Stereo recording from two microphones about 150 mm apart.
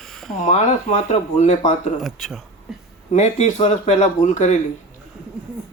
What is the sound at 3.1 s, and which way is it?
Speech, 50° left (ahead or behind).